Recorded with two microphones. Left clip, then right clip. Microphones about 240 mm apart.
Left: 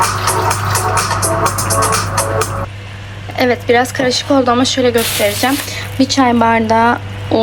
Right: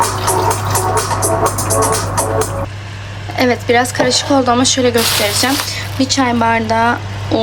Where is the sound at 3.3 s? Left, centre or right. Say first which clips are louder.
Left 1 dB; centre.